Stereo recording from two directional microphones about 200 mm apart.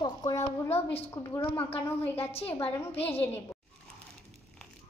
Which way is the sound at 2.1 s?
30° left (ahead or behind).